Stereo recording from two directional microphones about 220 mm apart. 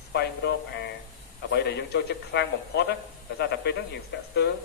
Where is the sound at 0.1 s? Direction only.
50° left (ahead or behind).